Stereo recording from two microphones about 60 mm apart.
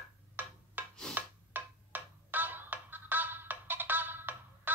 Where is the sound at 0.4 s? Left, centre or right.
Right.